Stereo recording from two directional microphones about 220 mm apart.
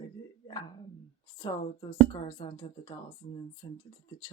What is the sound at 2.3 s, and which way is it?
Speech, 20° left (ahead or behind).